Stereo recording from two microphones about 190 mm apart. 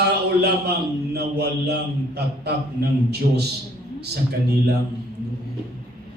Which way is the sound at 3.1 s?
60° right (ahead or behind).